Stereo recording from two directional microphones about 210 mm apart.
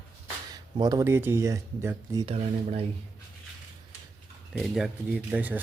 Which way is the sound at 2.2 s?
30° right (ahead or behind).